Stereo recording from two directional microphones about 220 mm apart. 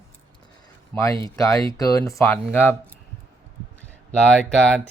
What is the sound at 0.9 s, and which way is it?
Speech, 15° left (ahead or behind).